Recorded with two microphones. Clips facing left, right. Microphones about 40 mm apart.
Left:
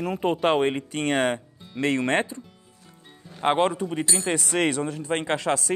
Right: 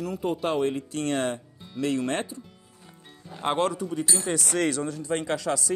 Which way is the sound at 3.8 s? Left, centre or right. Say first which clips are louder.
Left 2 dB; left.